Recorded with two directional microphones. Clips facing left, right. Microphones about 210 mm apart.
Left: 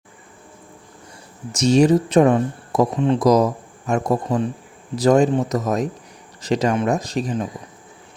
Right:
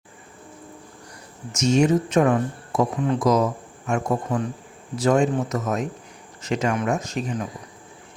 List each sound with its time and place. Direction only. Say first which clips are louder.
1.5 s speech: left 4 dB; 35° left (ahead or behind)